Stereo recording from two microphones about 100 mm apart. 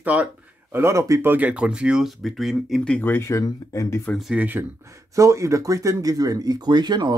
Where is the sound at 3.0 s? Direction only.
20° left (ahead or behind).